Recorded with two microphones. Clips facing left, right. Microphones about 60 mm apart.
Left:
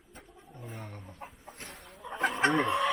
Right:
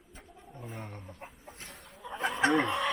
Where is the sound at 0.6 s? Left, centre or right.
Centre.